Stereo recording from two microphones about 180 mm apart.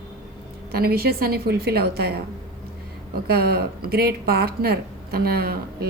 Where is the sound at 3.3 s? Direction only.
60° right (ahead or behind).